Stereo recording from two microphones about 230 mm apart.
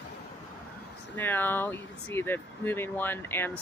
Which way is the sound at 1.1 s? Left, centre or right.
Centre.